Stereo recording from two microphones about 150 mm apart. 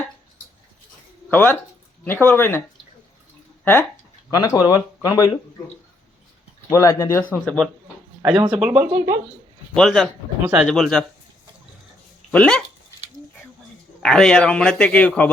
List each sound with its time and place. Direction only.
1.3 s speech: 10° left (ahead or behind)
6.7 s speech: 20° left (ahead or behind)
7.3 s speech: 5° left (ahead or behind)
9.7 s speech: 5° left (ahead or behind)
12.3 s speech: 5° left (ahead or behind)
14.0 s speech: 5° left (ahead or behind)